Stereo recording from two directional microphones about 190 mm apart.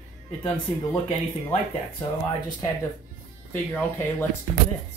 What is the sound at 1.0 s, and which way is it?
Speech, 35° left (ahead or behind).